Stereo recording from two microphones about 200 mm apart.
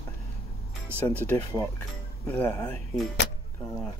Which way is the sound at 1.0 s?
10° left (ahead or behind).